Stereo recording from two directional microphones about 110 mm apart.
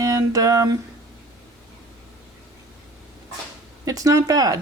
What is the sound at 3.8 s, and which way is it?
Speech, 30° right (ahead or behind).